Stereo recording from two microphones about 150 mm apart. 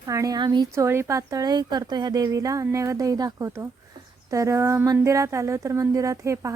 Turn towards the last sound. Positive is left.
turn(degrees=-20)  # may be behind; listen again after turning